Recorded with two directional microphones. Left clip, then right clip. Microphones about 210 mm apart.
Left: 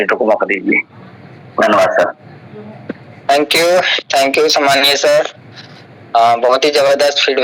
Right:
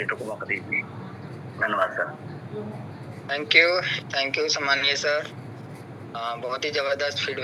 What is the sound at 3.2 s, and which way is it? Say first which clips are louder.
Speech: left 8 dB; 50° left (ahead or behind).